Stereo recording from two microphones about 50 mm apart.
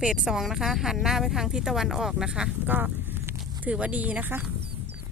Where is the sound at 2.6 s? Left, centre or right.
Right.